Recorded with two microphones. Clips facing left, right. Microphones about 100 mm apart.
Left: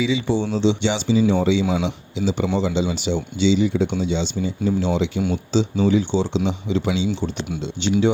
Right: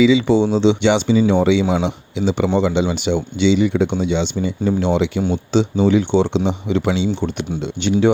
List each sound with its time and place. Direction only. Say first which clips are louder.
0.0 s speech: right 8 dB; 90° right
0.6 s speech: right 5 dB; 65° right (ahead or behind)